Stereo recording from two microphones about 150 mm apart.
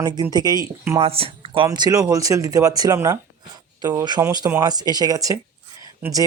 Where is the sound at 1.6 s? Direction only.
25° right (ahead or behind).